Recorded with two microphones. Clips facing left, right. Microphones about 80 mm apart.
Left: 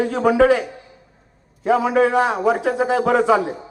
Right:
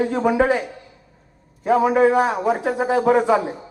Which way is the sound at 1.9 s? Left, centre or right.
Centre.